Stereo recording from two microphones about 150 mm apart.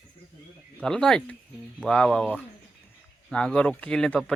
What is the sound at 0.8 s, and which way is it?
Speech, 5° left (ahead or behind).